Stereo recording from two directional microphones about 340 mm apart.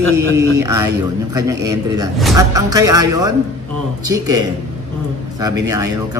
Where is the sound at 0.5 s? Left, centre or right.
Centre.